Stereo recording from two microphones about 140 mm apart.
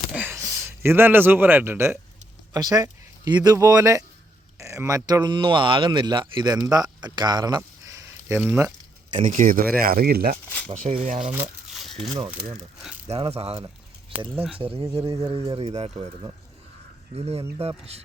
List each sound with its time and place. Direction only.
0.2 s speech: 20° right (ahead or behind)
2.5 s speech: 25° right (ahead or behind)
9.1 s speech: 65° right (ahead or behind); by 10.3 s 90° right
10.7 s speech: 45° right (ahead or behind)
13.1 s speech: 45° right (ahead or behind)
14.3 s speech: 5° right (ahead or behind)
14.6 s speech: 40° right (ahead or behind)
14.8 s speech: 20° right (ahead or behind)
15.3 s speech: 40° right (ahead or behind)
17.2 s speech: 45° right (ahead or behind)